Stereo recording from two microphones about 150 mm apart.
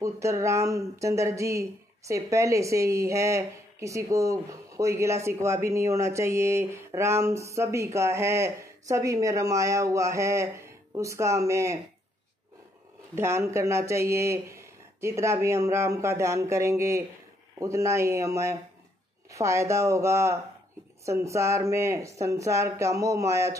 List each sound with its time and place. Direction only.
0.0 s speech: 20° right (ahead or behind)
13.1 s speech: 15° right (ahead or behind)